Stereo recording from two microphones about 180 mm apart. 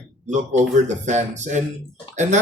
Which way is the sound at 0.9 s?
40° right (ahead or behind).